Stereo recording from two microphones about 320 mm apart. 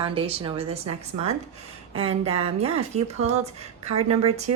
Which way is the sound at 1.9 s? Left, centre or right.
Centre.